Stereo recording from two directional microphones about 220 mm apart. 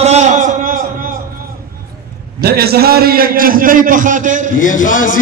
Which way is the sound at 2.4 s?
45° right (ahead or behind).